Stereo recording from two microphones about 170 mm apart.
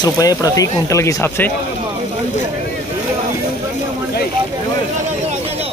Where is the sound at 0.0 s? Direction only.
20° left (ahead or behind).